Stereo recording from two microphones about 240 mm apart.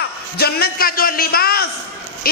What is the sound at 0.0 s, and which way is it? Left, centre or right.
A man's voice, left.